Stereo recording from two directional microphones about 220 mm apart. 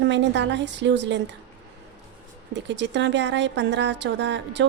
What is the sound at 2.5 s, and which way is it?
Speech, 50° right (ahead or behind).